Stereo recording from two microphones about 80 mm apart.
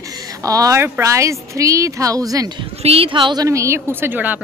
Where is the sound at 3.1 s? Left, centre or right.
Right.